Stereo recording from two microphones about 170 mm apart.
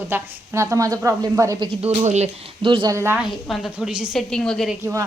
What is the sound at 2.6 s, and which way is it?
Speech, 30° right (ahead or behind).